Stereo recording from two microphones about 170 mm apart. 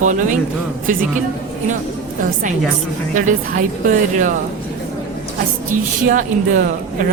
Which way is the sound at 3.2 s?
50° right (ahead or behind).